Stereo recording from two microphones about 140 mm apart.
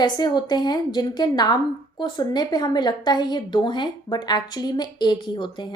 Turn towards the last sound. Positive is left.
turn(degrees=35)  # may be behind; listen again after turning